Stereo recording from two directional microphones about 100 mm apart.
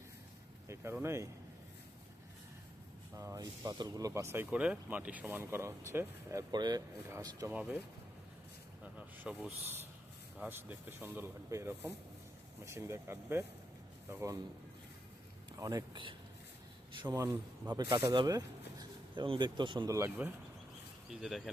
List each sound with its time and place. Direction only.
0.9 s speech: 25° right (ahead or behind)
3.2 s speech: 30° right (ahead or behind)
6.5 s speech: 45° right (ahead or behind)
7.1 s speech: 35° right (ahead or behind)
9.0 s speech: 10° right (ahead or behind)
15.5 s speech: 35° right (ahead or behind)
15.9 s speech: 55° right (ahead or behind)
16.9 s a sound: 50° right (ahead or behind)
17.2 s speech: 45° right (ahead or behind)
19.9 s speech: 30° right (ahead or behind)
21.1 s speech: 5° right (ahead or behind)